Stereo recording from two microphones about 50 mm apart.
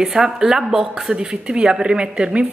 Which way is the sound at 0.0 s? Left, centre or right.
Centre.